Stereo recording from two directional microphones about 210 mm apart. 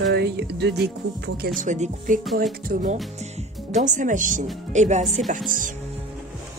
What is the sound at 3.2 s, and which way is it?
Speech, 35° right (ahead or behind).